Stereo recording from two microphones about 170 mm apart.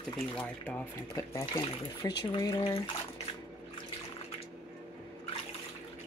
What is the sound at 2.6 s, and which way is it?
Speech, 30° left (ahead or behind).